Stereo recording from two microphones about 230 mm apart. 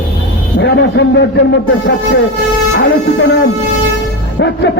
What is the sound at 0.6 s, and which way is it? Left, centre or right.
Speech, left.